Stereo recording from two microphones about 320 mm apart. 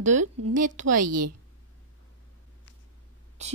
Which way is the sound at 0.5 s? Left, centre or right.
Right.